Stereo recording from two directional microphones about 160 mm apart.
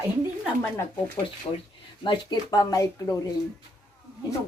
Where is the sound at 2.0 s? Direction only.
25° left (ahead or behind).